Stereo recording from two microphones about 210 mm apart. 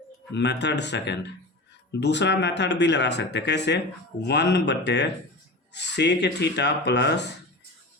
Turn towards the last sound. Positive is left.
turn(degrees=55)  # may be behind; listen again after turning